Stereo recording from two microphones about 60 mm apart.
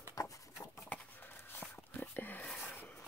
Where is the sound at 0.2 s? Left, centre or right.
Left.